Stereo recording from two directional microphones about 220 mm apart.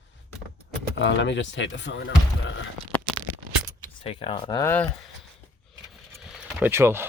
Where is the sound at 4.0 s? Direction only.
25° left (ahead or behind).